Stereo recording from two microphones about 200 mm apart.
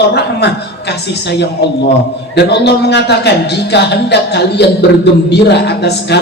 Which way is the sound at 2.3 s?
55° left (ahead or behind).